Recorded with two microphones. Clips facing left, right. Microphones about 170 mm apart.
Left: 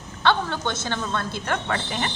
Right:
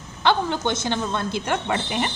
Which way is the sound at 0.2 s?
15° right (ahead or behind).